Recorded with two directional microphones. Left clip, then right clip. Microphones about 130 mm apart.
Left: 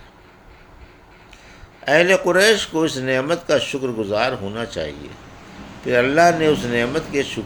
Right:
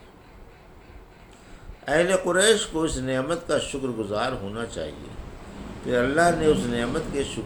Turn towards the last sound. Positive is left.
turn(degrees=50)  # may be behind; listen again after turning